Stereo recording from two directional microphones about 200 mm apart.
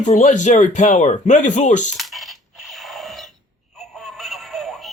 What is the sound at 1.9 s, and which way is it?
Coin, centre (ahead or behind).